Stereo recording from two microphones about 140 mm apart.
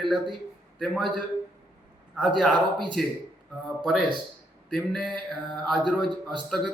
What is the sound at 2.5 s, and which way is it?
Speech, 35° right (ahead or behind).